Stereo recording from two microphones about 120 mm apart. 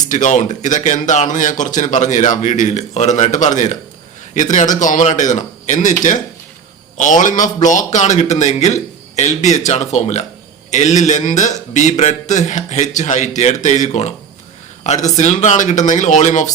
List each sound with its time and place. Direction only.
0.1 s a man's voice: 90° left
6.9 s a man's voice: 90° left; by 10.2 s 70° left (ahead or behind)
10.7 s a man's voice: 85° left